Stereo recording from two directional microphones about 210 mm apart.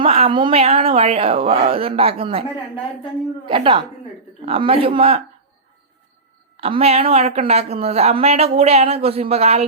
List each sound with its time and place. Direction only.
0.0 s a woman's voice: 25° right (ahead or behind)
3.5 s a woman's voice: 25° right (ahead or behind)
6.6 s a woman's voice: 30° right (ahead or behind)